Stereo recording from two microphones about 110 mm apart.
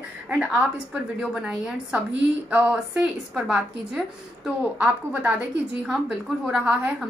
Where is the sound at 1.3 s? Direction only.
10° right (ahead or behind).